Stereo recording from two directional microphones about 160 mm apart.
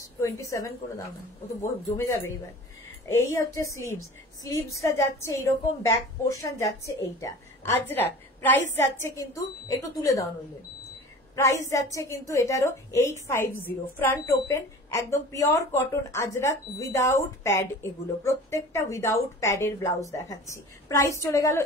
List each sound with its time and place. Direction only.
0.0 s a woman's voice: 20° left (ahead or behind)
3.1 s a woman's voice: 20° left (ahead or behind)
11.3 s a woman's voice: 20° left (ahead or behind)